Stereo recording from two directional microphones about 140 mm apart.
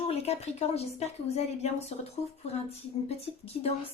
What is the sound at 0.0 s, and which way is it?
Speech, 45° left (ahead or behind).